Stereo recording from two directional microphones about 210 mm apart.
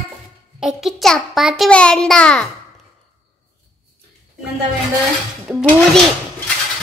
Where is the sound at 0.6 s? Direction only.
5° right (ahead or behind).